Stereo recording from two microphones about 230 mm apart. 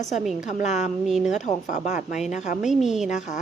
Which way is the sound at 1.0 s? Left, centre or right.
Centre.